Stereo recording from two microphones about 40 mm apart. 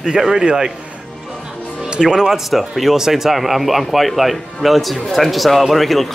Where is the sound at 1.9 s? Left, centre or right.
Centre.